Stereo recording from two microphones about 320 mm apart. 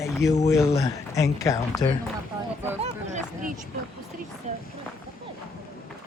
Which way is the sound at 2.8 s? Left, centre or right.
Right.